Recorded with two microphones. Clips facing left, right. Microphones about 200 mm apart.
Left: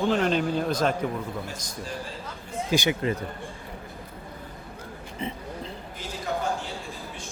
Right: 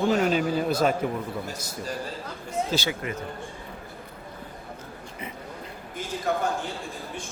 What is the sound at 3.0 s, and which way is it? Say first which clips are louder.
Speech: left 5 dB; 30° left (ahead or behind).